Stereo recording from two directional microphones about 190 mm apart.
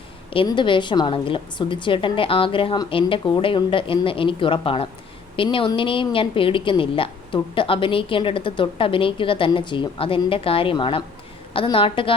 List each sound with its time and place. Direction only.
0.3 s a woman's voice: 25° left (ahead or behind)